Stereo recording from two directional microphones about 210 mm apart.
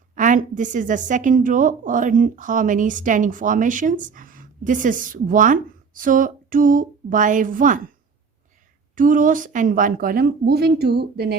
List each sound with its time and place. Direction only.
0.2 s a woman's voice: 35° right (ahead or behind)
9.0 s a woman's voice: 40° right (ahead or behind)